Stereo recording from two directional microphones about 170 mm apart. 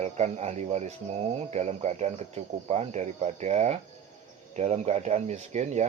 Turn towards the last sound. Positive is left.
turn(degrees=-40)  # may be behind; listen again after turning